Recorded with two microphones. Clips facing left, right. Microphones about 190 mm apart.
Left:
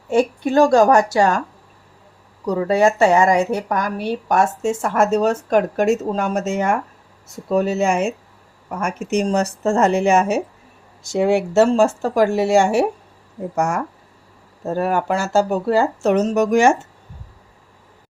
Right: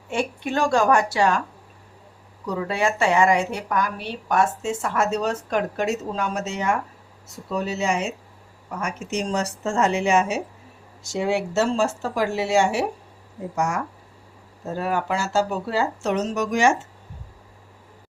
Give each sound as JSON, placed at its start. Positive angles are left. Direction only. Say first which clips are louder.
{"t": 0.1, "sound": "a woman's voice", "louder": "left 8 dB", "side_deg": 40}
{"t": 2.5, "sound": "speech", "louder": "left 8 dB", "side_deg": 40}